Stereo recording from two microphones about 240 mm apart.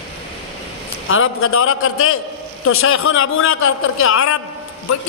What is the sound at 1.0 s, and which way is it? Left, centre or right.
A man's voice, left.